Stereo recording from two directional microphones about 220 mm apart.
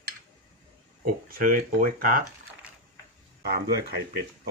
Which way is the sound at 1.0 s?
40° right (ahead or behind).